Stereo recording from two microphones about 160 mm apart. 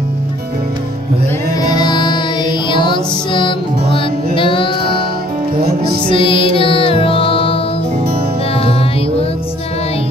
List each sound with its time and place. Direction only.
1.6 s music: 25° left (ahead or behind)
6.0 s music: 30° left (ahead or behind)